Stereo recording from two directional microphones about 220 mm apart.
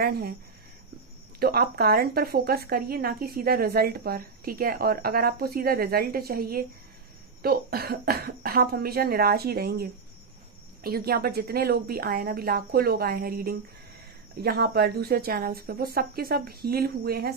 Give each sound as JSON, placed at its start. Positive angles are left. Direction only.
{"t": 0.0, "sound": "speech", "side_deg": -45}
{"t": 1.4, "sound": "speech", "side_deg": -45}